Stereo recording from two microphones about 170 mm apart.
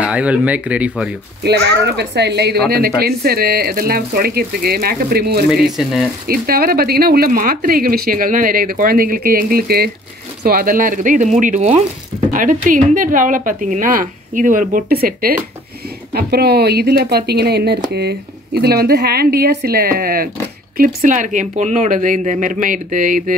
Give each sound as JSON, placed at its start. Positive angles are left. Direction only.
{"t": 0.0, "sound": "speech", "side_deg": -10}
{"t": 1.4, "sound": "speech", "side_deg": -80}